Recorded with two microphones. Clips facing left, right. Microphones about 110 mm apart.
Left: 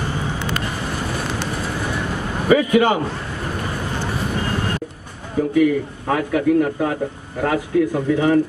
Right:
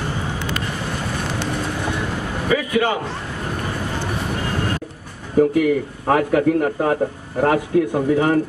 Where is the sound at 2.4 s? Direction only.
25° left (ahead or behind).